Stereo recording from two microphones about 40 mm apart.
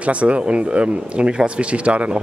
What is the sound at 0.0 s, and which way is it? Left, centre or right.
Speech, right.